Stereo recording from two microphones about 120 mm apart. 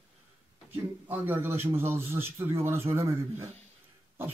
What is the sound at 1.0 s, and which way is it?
A man's voice, 15° right (ahead or behind).